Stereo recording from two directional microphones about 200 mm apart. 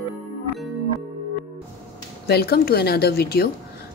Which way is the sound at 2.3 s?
50° left (ahead or behind).